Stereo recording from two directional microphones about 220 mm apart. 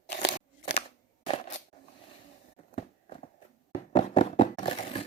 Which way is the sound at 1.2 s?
30° left (ahead or behind).